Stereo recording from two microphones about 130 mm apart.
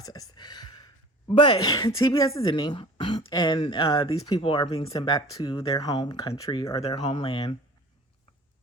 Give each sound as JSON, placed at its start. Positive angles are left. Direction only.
{"t": 0.0, "sound": "a sound", "side_deg": 30}
{"t": 1.4, "sound": "speech", "side_deg": 35}
{"t": 2.5, "sound": "speech", "side_deg": 40}
{"t": 4.7, "sound": "speech", "side_deg": 50}
{"t": 5.0, "sound": "speech", "side_deg": 30}
{"t": 7.0, "sound": "speech", "side_deg": 40}